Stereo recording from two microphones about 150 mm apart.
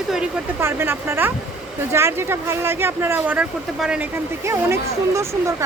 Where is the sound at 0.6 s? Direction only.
15° right (ahead or behind).